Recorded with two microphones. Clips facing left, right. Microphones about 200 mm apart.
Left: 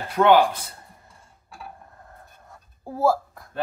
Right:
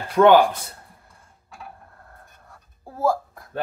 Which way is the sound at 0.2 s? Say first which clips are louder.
Right 4 dB; 80° right.